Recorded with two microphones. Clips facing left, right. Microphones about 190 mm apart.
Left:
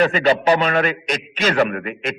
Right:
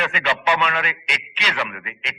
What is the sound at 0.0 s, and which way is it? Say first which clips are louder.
A man's voice: left 8 dB; 40° left (ahead or behind).